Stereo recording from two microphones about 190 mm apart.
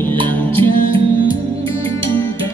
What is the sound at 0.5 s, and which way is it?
Music, 25° right (ahead or behind).